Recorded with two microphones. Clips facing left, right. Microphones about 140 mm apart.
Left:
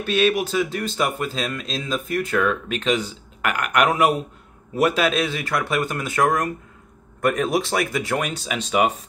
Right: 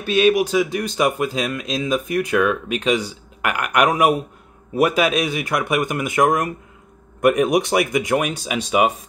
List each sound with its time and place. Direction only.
0.0 s speech: 10° right (ahead or behind)